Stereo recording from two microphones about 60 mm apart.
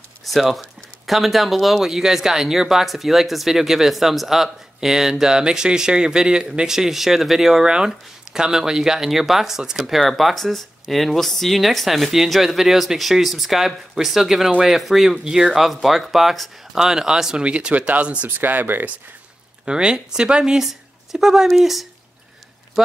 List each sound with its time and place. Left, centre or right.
0.2 s speech: centre; by 18.3 s right
18.4 s speech: right
19.6 s speech: centre